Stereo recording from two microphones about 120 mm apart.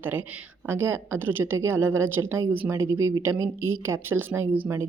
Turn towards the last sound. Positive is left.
turn(degrees=-20)  # may be behind; listen again after turning